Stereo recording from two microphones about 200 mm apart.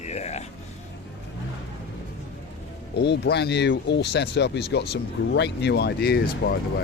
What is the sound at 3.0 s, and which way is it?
Speech, 55° left (ahead or behind).